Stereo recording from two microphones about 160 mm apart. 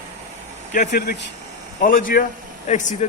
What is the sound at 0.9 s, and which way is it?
Speech, 90° left.